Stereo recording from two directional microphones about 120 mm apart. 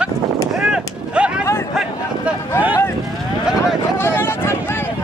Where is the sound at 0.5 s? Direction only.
10° right (ahead or behind).